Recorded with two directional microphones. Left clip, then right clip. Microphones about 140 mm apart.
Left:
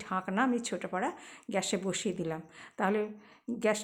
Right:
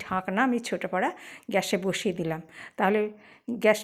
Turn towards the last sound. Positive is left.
turn(degrees=-25)  # may be behind; listen again after turning